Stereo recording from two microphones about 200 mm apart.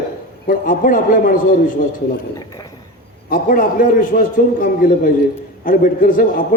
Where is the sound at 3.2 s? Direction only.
45° left (ahead or behind).